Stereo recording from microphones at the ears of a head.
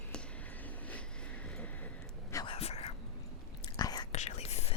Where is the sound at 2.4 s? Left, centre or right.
Left.